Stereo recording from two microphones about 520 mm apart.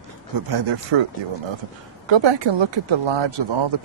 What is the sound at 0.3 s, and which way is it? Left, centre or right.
Speech, right.